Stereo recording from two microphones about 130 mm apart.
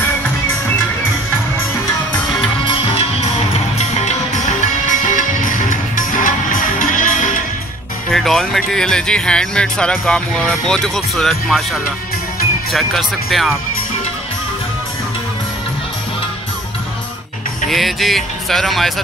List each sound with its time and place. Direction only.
5.7 s music: 90° left
8.1 s speech: centre (ahead or behind)
12.7 s speech: centre (ahead or behind)
17.6 s speech: centre (ahead or behind)